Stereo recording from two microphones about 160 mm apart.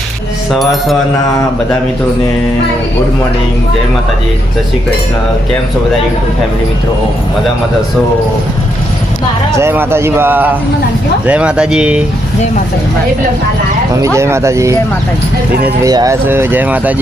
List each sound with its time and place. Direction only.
0.5 s speech: centre (ahead or behind)
9.6 s speech: 15° right (ahead or behind)
13.9 s speech: 20° right (ahead or behind)
15.8 s speech: 20° right (ahead or behind)